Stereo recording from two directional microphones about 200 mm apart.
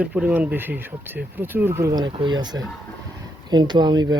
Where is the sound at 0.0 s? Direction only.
5° right (ahead or behind).